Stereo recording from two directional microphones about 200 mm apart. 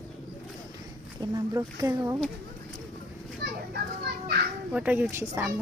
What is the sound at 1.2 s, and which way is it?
Speech, 15° right (ahead or behind).